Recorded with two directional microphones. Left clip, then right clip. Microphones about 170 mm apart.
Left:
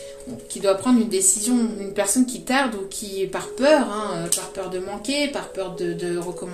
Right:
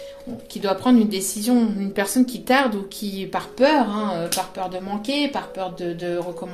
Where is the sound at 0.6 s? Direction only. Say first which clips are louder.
Even; 50° right (ahead or behind).